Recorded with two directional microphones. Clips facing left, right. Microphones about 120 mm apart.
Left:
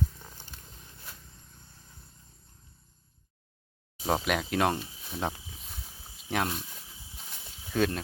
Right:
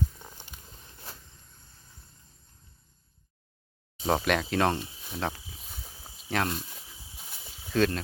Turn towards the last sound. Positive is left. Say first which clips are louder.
# right 2 dB
turn(degrees=10)  # may be behind; listen again after turning